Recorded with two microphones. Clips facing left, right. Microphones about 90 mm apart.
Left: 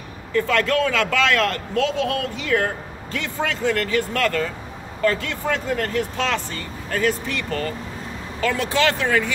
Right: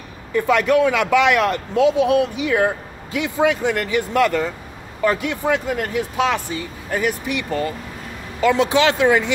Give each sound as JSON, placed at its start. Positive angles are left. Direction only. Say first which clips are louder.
{"t": 0.3, "sound": "a man's voice", "louder": "right 4 dB", "side_deg": -15}